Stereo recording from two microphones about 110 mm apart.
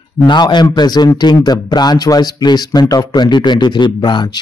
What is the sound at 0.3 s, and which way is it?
A man's voice, 40° left (ahead or behind).